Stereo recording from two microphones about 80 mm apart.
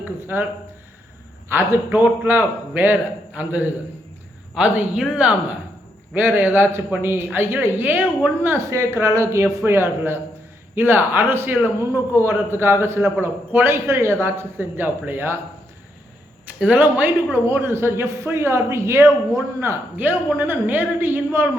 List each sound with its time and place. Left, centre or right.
0.0 s speech: right
1.5 s a man's voice: right
8.4 s a man's voice: right
16.6 s a man's voice: centre